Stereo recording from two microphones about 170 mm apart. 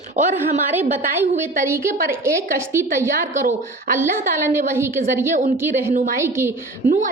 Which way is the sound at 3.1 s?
50° right (ahead or behind).